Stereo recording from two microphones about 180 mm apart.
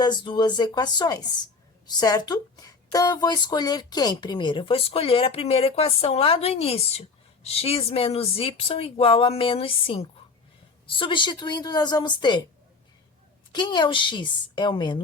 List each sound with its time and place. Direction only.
0.0 s a woman's voice: 25° left (ahead or behind)
13.5 s a woman's voice: 25° left (ahead or behind)